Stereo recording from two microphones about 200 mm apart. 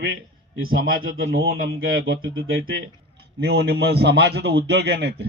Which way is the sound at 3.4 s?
55° right (ahead or behind).